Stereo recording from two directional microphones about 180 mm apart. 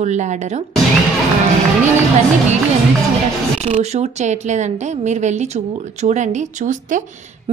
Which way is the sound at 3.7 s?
40° right (ahead or behind).